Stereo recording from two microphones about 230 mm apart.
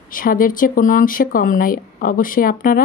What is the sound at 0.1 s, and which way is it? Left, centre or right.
Speech, left.